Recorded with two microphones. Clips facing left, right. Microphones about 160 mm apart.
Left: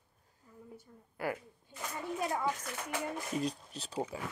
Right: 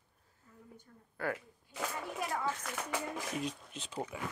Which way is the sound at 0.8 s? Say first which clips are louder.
Even; 10° left (ahead or behind).